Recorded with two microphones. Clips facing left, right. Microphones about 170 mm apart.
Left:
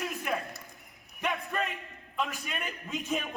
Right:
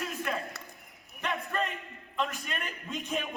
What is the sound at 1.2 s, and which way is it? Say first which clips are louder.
A man's voice: even; centre (ahead or behind).